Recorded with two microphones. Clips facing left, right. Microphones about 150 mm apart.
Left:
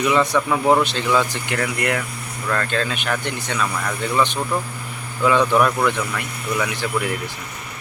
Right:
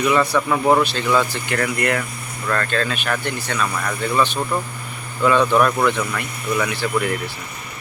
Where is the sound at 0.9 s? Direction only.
20° left (ahead or behind).